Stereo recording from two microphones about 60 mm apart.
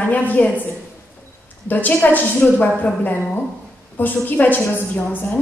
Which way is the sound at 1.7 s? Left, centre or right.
Left.